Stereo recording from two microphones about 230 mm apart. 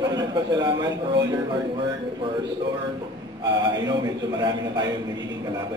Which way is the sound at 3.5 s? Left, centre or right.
Centre.